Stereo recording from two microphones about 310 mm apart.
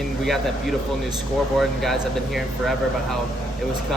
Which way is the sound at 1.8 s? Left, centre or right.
Centre.